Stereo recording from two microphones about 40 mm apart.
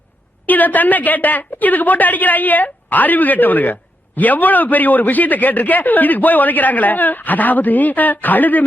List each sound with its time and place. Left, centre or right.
0.4 s a man's voice: left